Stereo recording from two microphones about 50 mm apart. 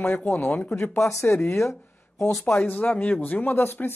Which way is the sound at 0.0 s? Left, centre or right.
Left.